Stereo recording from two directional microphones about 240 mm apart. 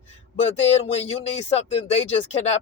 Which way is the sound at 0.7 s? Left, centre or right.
Left.